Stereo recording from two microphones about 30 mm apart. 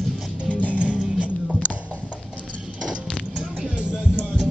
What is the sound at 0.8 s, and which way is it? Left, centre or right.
Music, right.